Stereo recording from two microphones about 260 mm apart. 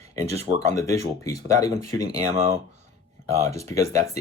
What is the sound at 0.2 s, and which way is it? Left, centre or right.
Speech, right.